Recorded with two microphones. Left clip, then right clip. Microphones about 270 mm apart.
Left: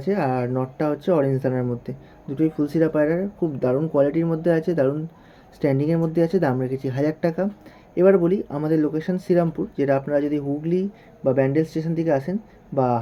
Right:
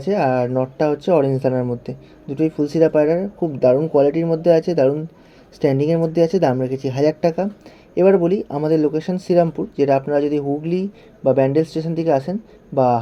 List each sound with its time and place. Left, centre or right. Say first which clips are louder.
0.0 s speech: right 5 dB; centre
6.7 s speech: right 6 dB; left
7.2 s speech: right 4 dB; centre